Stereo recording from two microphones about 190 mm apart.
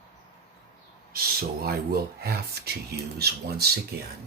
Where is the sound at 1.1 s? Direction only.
50° right (ahead or behind).